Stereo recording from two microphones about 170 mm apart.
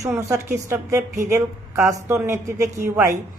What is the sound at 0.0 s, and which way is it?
A woman's voice, 15° right (ahead or behind).